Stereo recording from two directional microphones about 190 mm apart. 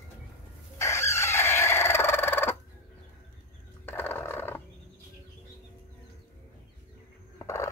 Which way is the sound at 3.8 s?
10° left (ahead or behind).